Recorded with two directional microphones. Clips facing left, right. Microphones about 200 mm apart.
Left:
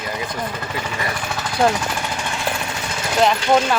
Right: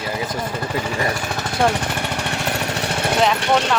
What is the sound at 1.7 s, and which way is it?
Jackhammer, 60° right (ahead or behind).